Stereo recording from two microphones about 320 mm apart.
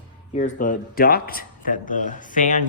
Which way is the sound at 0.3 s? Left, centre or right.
Left.